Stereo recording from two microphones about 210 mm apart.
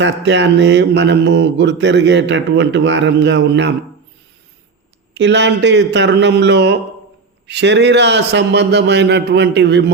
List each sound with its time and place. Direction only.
0.0 s speech: 60° right (ahead or behind)
5.1 s speech: 55° right (ahead or behind)